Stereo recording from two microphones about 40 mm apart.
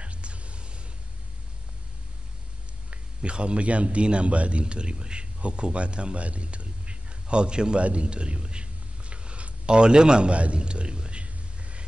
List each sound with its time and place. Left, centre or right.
0.0 s whispering: right
2.9 s a man's voice: right
7.8 s a sound: right